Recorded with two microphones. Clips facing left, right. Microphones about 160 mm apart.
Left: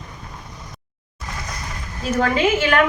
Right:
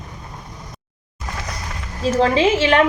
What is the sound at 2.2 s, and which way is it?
Speech, 30° right (ahead or behind).